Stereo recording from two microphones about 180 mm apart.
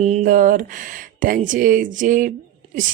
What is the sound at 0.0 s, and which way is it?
A woman's voice, 45° right (ahead or behind).